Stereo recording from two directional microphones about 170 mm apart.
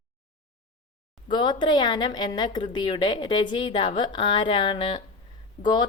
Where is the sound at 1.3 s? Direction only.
25° left (ahead or behind).